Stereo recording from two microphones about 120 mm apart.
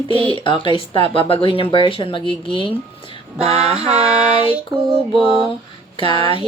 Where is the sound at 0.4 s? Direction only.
45° left (ahead or behind).